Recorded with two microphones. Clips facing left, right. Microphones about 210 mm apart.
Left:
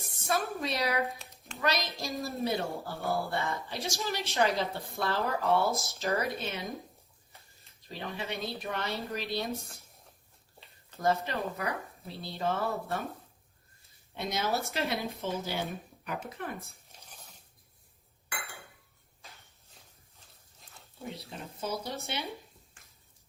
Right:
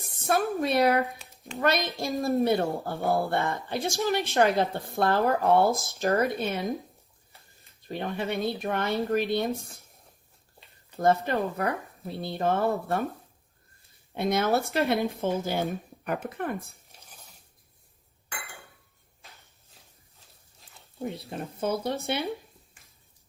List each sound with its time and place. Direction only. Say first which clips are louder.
0.3 s speech: right 6 dB; 55° right (ahead or behind)
1.0 s a sound: even; centre (ahead or behind)
1.5 s speech: right 6 dB; 55° right (ahead or behind)
7.9 s speech: right 7 dB; 55° right (ahead or behind)
10.9 s speech: right 6 dB; 50° right (ahead or behind)
14.1 s speech: right 7 dB; 55° right (ahead or behind)
16.6 s squish: right 7 dB; centre (ahead or behind)
20.6 s a sound: even; centre (ahead or behind)
21.2 s speech: right 7 dB; 55° right (ahead or behind)